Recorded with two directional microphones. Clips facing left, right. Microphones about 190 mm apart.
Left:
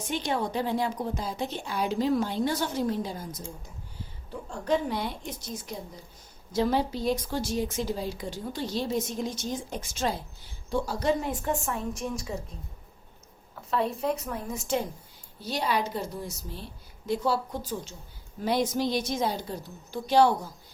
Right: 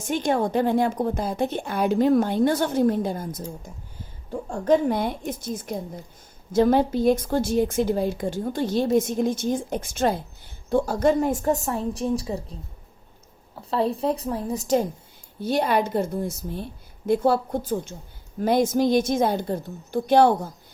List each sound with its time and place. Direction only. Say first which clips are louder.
0.0 s a woman's voice: right 6 dB; 50° right (ahead or behind)
13.6 s a woman's voice: right 5 dB; 30° right (ahead or behind)
15.4 s a woman's voice: right 7 dB; 55° right (ahead or behind)